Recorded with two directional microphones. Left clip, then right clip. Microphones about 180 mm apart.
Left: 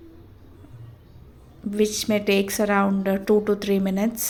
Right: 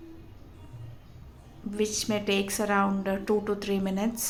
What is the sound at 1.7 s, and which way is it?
A woman's voice, 25° left (ahead or behind).